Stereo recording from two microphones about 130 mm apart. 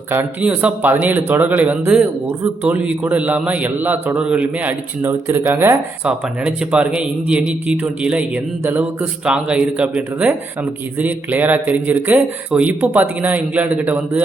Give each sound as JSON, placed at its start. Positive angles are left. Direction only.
{"t": 0.1, "sound": "speech", "side_deg": -15}